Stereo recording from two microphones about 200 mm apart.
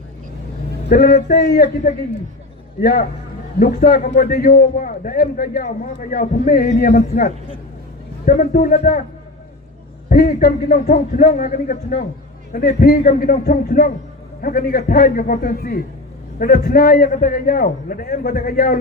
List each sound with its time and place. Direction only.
0.9 s a man's voice: 50° left (ahead or behind)
10.1 s a man's voice: 45° left (ahead or behind)